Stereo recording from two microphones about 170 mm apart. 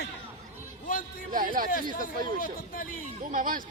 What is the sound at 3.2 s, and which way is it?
Speech, 55° right (ahead or behind).